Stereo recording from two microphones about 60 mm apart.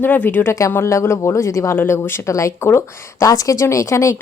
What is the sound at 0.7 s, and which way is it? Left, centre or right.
Speech, left.